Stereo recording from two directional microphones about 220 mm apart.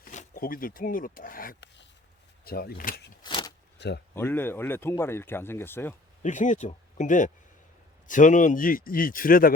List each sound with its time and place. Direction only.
0.0 s speech: 35° left (ahead or behind)
3.2 s speech: 20° left (ahead or behind)
3.8 s speech: 50° left (ahead or behind)
4.1 s speech: 10° left (ahead or behind)
6.2 s a man's voice: 35° left (ahead or behind)